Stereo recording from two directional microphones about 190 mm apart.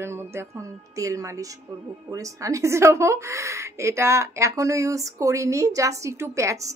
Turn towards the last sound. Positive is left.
turn(degrees=-15)  # may be behind; listen again after turning